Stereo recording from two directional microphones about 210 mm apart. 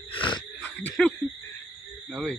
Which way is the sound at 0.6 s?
5° left (ahead or behind).